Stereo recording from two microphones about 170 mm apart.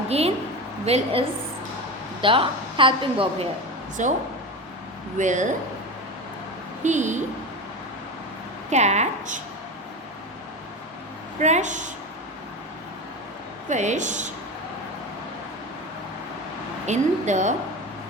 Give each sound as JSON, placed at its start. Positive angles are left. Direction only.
{"t": 0.1, "sound": "a sound", "side_deg": -35}
{"t": 0.9, "sound": "a woman's voice", "side_deg": -35}
{"t": 4.0, "sound": "a woman's voice", "side_deg": -45}
{"t": 6.8, "sound": "a woman's voice", "side_deg": -45}
{"t": 8.7, "sound": "a woman's voice", "side_deg": -40}
{"t": 11.3, "sound": "a woman's voice", "side_deg": -45}
{"t": 13.7, "sound": "a woman's voice", "side_deg": -45}
{"t": 16.8, "sound": "a woman's voice", "side_deg": -45}